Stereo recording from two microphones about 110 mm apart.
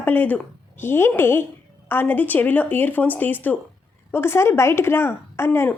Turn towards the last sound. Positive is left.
turn(degrees=20)  # may be behind; listen again after turning